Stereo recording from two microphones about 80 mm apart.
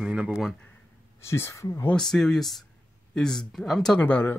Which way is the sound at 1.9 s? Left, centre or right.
Centre.